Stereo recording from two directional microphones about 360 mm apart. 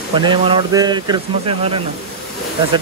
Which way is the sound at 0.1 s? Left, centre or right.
Centre.